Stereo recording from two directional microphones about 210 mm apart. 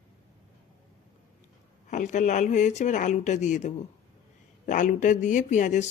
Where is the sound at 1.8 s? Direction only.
35° left (ahead or behind).